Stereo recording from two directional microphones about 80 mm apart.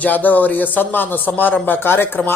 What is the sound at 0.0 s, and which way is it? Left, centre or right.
Speech, left.